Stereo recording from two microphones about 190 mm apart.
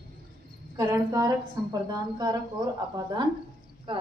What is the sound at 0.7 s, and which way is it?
A woman's voice, 15° right (ahead or behind).